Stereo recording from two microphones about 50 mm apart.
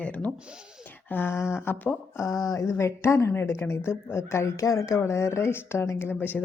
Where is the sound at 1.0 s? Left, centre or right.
Left.